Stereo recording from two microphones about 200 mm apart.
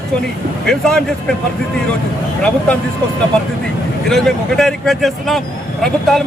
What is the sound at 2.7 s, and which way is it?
Speech, 5° left (ahead or behind).